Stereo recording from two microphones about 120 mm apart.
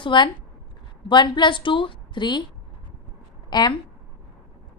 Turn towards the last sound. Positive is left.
turn(degrees=35)  # may be behind; listen again after turning